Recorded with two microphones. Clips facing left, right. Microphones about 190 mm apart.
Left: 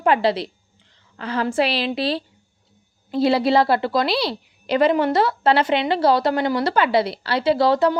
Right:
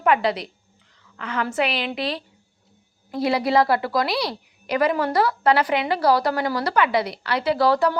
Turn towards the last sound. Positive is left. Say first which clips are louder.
# left 2 dB
turn(degrees=25)  # may be behind; listen again after turning